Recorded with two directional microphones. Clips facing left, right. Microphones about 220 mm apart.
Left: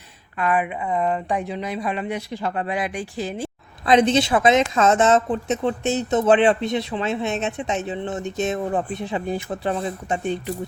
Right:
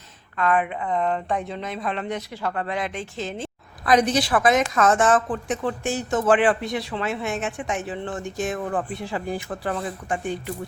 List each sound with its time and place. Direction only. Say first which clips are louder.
0.3 s speech: even; 10° left (ahead or behind)
3.8 s a woman's voice: left 3 dB; 25° left (ahead or behind)